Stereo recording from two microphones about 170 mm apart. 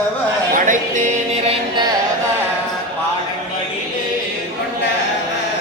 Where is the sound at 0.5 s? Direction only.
50° right (ahead or behind).